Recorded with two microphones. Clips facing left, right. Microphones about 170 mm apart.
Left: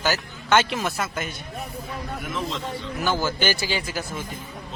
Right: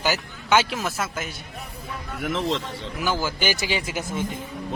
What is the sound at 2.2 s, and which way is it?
Speech, 75° right (ahead or behind).